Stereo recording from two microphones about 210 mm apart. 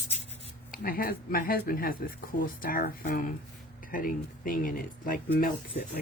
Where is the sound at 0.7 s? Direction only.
45° left (ahead or behind).